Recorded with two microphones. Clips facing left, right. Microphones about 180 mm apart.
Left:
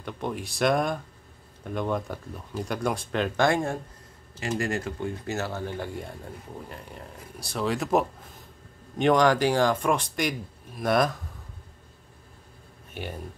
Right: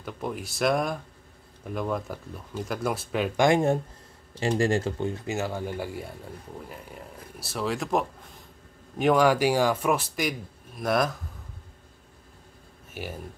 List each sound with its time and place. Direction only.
0.0 s speech: centre (ahead or behind)
3.4 s speech: 20° right (ahead or behind)
5.2 s speech: 15° right (ahead or behind)
12.9 s speech: 5° right (ahead or behind)